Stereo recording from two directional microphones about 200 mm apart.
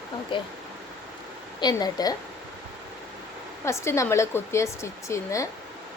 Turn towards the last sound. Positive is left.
turn(degrees=15)  # may be behind; listen again after turning